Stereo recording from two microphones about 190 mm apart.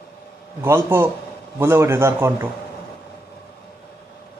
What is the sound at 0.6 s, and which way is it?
A man's voice, 15° right (ahead or behind).